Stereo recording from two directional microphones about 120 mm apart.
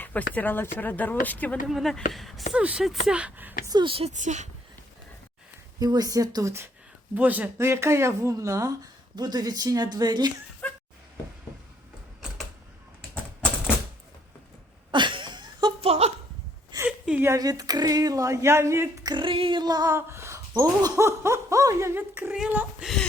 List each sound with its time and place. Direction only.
0.0 s speech: 15° left (ahead or behind)
1.6 s speech: centre (ahead or behind)
3.7 s speech: 40° right (ahead or behind)
4.2 s speech: 85° right
5.8 s female singing: 30° right (ahead or behind)
7.1 s speech: 15° right (ahead or behind); by 10.3 s 35° right (ahead or behind)
10.6 s a sound: 15° left (ahead or behind)
14.8 s a sound: 40° right (ahead or behind)
15.8 s a sound: 60° right (ahead or behind)
16.8 s a sound: 15° right (ahead or behind)
17.3 s speech: 30° right (ahead or behind)
19.1 s female singing: 45° right (ahead or behind); by 20.4 s 20° right (ahead or behind)
21.0 s speech: 25° right (ahead or behind)